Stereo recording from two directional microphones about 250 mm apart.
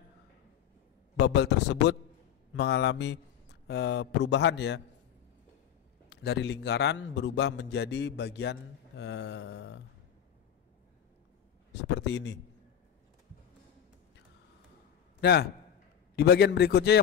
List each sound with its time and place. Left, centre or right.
1.1 s a man's voice: left
6.0 s a man's voice: left
11.8 s a man's voice: left
15.1 s a man's voice: left